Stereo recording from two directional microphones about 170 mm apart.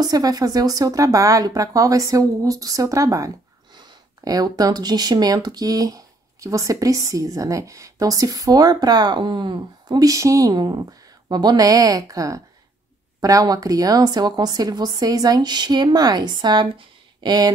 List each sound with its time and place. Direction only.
0.0 s speech: 20° right (ahead or behind)